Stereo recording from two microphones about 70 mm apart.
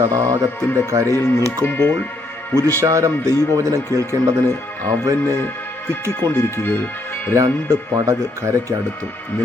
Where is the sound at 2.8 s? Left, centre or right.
Right.